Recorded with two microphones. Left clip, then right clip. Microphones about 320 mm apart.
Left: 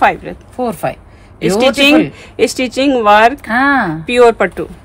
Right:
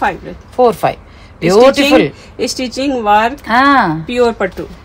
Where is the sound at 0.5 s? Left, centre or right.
Centre.